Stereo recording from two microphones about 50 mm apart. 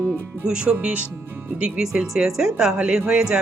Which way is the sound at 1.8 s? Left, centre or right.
Centre.